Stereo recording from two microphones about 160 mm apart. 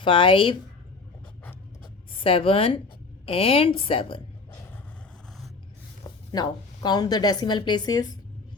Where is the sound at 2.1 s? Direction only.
35° left (ahead or behind).